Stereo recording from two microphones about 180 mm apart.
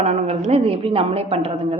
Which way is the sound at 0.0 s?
40° right (ahead or behind).